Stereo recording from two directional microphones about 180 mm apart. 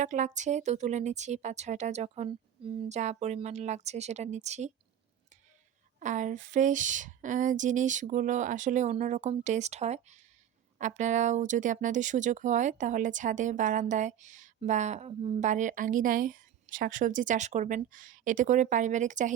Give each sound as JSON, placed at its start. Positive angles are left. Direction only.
{"t": 0.0, "sound": "speech", "side_deg": -45}
{"t": 6.0, "sound": "speech", "side_deg": -45}